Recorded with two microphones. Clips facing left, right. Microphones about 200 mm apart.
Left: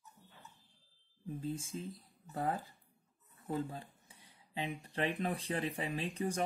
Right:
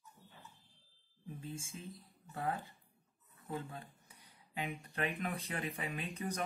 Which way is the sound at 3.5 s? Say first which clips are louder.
Left 4 dB; 30° left (ahead or behind).